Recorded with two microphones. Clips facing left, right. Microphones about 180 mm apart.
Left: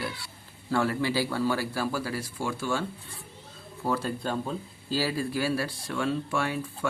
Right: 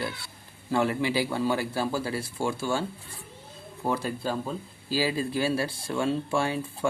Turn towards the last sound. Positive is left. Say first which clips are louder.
# right 2 dB
turn(degrees=-30)  # may be behind; listen again after turning